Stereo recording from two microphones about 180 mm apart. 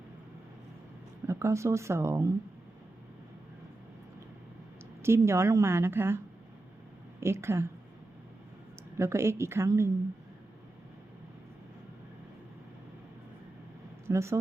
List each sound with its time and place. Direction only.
1.3 s a woman's voice: 15° right (ahead or behind)
5.0 s a woman's voice: 15° right (ahead or behind)
9.0 s a woman's voice: 15° right (ahead or behind)
14.1 s a woman's voice: 15° right (ahead or behind)